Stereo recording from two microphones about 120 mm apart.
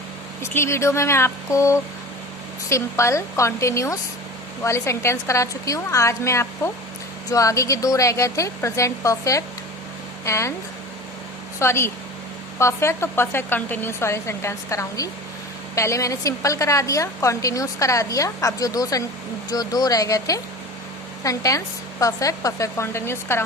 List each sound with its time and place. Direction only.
0.5 s a woman's voice: 20° left (ahead or behind)
11.6 s a woman's voice: 20° left (ahead or behind)